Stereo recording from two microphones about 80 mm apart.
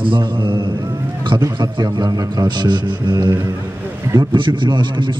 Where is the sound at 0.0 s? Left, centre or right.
Right.